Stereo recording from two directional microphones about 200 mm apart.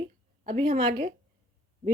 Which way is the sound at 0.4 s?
25° right (ahead or behind).